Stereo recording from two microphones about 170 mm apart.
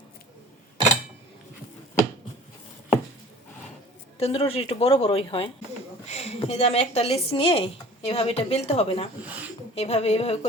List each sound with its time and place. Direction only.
4.2 s a woman's voice: 35° left (ahead or behind)
9.2 s speech: 10° right (ahead or behind)
9.7 s a woman's voice: 40° left (ahead or behind)